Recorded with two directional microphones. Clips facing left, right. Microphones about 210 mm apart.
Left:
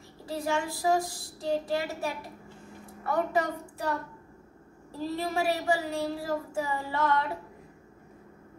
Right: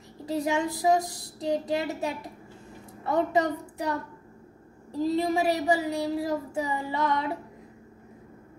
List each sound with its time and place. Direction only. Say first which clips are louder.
0.3 s a sound: right 4 dB; 20° right (ahead or behind)
3.0 s a woman's voice: right 3 dB; 20° right (ahead or behind)
4.9 s speech: right 6 dB; 15° right (ahead or behind)